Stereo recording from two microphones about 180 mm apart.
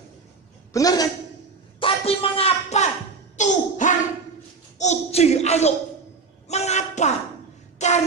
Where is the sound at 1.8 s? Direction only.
30° left (ahead or behind).